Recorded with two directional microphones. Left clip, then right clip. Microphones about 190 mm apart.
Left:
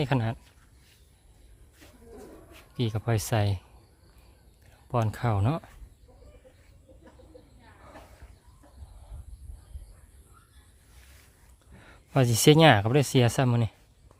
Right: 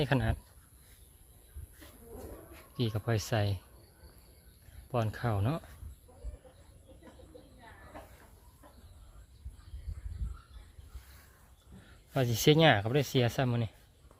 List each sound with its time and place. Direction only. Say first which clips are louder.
0.0 s speech: left 2 dB; 15° left (ahead or behind)
2.7 s speech: left 4 dB; 20° left (ahead or behind)
4.9 s speech: left 5 dB; 25° left (ahead or behind)
12.1 s speech: left 6 dB; 35° left (ahead or behind)